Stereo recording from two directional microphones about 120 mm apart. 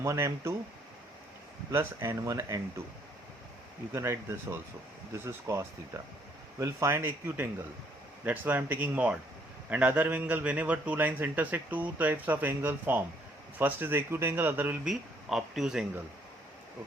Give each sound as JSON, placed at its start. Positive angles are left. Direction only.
{"t": 0.0, "sound": "speech", "side_deg": -25}
{"t": 1.7, "sound": "speech", "side_deg": -20}
{"t": 3.9, "sound": "a man's voice", "side_deg": -25}
{"t": 14.8, "sound": "speech", "side_deg": -5}